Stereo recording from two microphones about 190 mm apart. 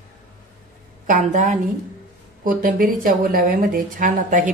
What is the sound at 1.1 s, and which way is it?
A woman's voice, 40° right (ahead or behind).